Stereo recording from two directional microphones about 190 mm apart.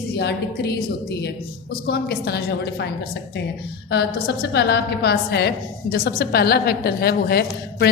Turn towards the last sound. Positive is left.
turn(degrees=55)  # may be behind; listen again after turning